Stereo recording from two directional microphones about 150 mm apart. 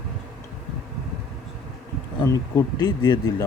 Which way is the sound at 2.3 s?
25° left (ahead or behind).